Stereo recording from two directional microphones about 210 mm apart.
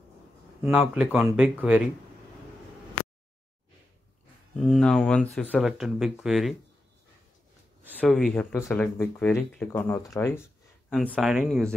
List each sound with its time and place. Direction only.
0.7 s speech: 5° right (ahead or behind)
4.6 s speech: centre (ahead or behind)
8.0 s speech: centre (ahead or behind)
10.4 s speech: centre (ahead or behind)